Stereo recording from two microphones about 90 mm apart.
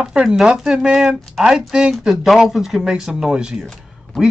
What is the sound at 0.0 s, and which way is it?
Speech, 10° right (ahead or behind).